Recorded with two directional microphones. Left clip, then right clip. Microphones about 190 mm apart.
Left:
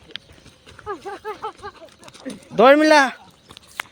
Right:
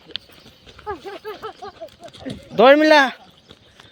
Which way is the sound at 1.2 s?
20° left (ahead or behind).